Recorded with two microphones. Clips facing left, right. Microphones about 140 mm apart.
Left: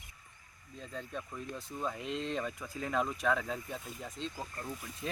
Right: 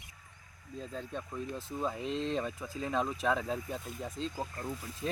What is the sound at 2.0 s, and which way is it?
Speech, 35° right (ahead or behind).